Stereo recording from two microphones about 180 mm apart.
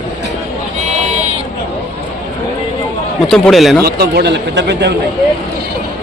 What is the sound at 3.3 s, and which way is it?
Speech, centre (ahead or behind).